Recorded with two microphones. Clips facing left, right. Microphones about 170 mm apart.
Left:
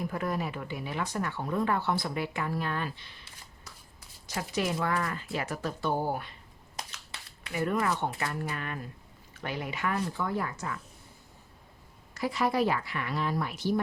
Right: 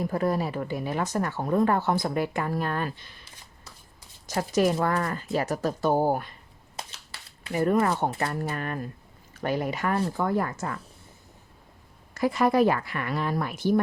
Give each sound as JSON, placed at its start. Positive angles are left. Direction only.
{"t": 0.0, "sound": "speech", "side_deg": -35}
{"t": 4.3, "sound": "speech", "side_deg": -45}
{"t": 6.8, "sound": "a sound", "side_deg": -25}
{"t": 7.4, "sound": "speech", "side_deg": -40}
{"t": 10.2, "sound": "speech", "side_deg": -50}
{"t": 12.1, "sound": "speech", "side_deg": -50}